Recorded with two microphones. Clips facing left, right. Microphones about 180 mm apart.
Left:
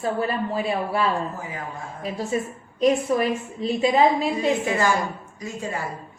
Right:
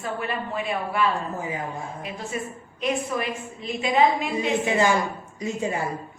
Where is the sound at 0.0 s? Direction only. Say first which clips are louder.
Left 5 dB; 35° left (ahead or behind).